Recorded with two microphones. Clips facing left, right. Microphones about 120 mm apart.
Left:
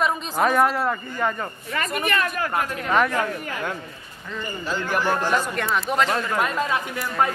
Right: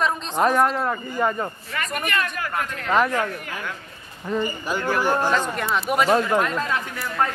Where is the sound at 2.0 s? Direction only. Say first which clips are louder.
Left 3 dB; 35° left (ahead or behind).